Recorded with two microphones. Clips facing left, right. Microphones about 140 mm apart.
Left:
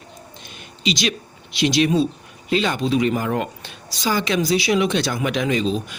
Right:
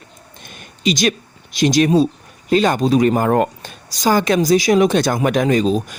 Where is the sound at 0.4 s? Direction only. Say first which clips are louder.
Right 5 dB; 50° right (ahead or behind).